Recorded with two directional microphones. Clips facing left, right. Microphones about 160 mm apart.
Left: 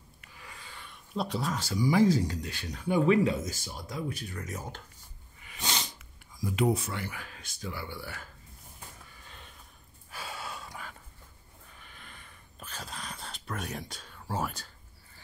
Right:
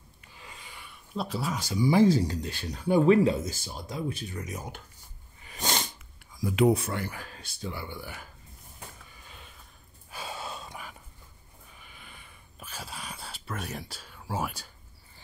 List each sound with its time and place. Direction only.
0.4 s a sound: 20° right (ahead or behind)
1.8 s speech: 30° right (ahead or behind)
5.4 s sneeze: 40° right (ahead or behind)
6.4 s speech: 90° right; by 8.3 s 15° right (ahead or behind)
10.1 s gasp: 25° right (ahead or behind)
11.7 s a sound: 10° right (ahead or behind)